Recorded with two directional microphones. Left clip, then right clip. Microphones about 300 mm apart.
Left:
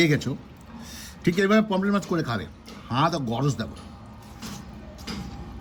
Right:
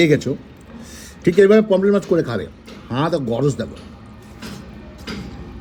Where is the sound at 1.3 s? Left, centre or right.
Centre.